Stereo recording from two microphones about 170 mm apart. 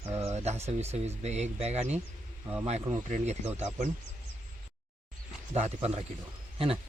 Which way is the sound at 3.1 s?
40° right (ahead or behind).